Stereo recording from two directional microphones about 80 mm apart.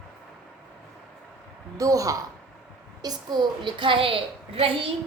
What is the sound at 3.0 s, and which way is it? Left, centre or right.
A woman's voice, right.